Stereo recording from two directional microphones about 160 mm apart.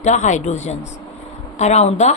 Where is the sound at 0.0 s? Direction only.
50° left (ahead or behind).